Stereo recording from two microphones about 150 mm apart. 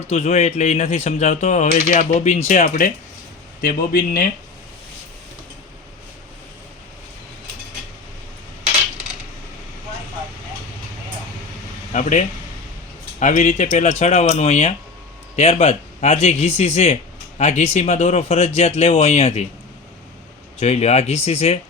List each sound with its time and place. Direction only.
0.1 s a man's voice: 45° left (ahead or behind); by 2.9 s 65° left (ahead or behind)
3.6 s a man's voice: 75° left (ahead or behind)
11.9 s a sound: 55° left (ahead or behind)
13.1 s a man's voice: 55° left (ahead or behind)
20.6 s a man's voice: 45° left (ahead or behind)